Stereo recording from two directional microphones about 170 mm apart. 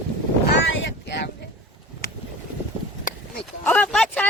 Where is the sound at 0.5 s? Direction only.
90° left.